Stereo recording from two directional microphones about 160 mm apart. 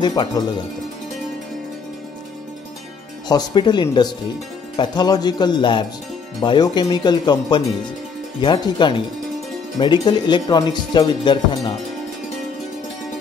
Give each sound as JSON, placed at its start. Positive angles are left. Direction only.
{"t": 0.0, "sound": "speech", "side_deg": 25}
{"t": 3.3, "sound": "speech", "side_deg": 25}